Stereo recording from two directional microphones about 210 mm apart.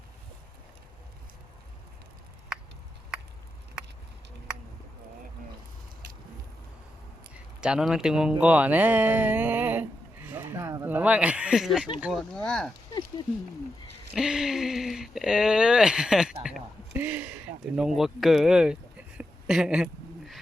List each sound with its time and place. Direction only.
7.6 s speech: 5° right (ahead or behind)
12.9 s a sound: 20° left (ahead or behind)
14.1 s speech: 5° right (ahead or behind)